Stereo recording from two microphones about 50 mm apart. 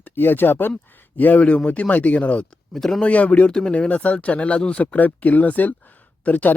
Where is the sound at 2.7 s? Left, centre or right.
Centre.